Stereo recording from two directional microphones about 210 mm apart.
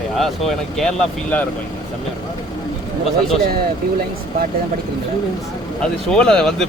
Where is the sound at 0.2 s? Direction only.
Centre (ahead or behind).